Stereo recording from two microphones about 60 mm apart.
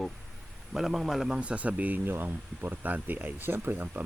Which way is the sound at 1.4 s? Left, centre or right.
Right.